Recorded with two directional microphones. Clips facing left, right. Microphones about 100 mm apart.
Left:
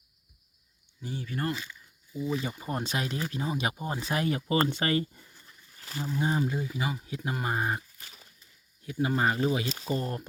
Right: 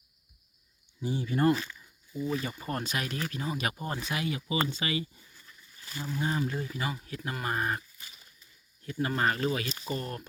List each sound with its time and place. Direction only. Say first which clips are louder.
1.0 s speech: right 7 dB; 15° right (ahead or behind)
2.3 s speech: left 2 dB; 15° left (ahead or behind)
2.8 s speech: left 2 dB; 25° left (ahead or behind)
4.0 s speech: left 7 dB; 40° left (ahead or behind)
5.3 s a sound: even; 25° left (ahead or behind)
6.1 s speech: left 3 dB; 25° left (ahead or behind)
6.5 s speech: left 2 dB; 10° left (ahead or behind)